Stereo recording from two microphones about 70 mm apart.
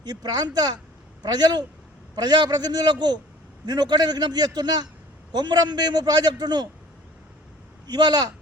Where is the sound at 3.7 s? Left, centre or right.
Right.